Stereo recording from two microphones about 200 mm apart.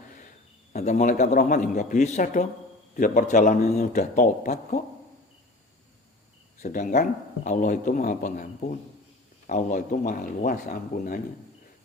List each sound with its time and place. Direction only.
0.7 s a man's voice: 40° left (ahead or behind)
6.6 s a man's voice: 40° left (ahead or behind)